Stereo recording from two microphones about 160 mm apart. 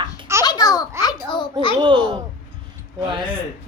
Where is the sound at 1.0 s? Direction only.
30° left (ahead or behind).